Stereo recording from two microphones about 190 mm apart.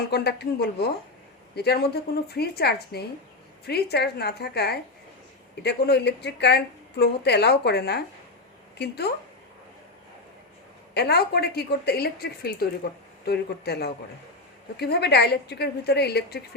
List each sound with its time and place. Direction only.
0.1 s speech: 60° left (ahead or behind)
10.9 s speech: 60° left (ahead or behind)